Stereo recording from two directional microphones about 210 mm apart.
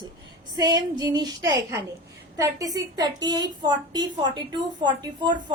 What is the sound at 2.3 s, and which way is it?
Child singing, 15° right (ahead or behind).